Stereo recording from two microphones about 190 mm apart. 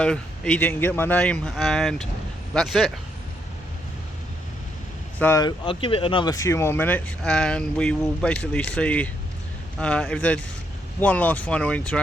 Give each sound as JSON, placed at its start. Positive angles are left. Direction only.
{"t": 0.0, "sound": "speech", "side_deg": 5}
{"t": 5.2, "sound": "speech", "side_deg": 15}